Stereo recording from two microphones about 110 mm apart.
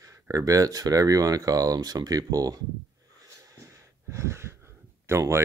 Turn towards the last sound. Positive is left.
turn(degrees=-25)  # may be behind; listen again after turning